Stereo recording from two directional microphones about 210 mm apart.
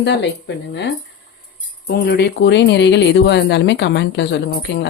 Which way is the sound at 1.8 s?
50° left (ahead or behind).